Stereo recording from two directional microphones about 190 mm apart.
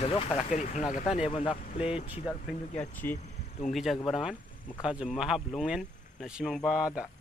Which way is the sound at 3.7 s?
Centre (ahead or behind).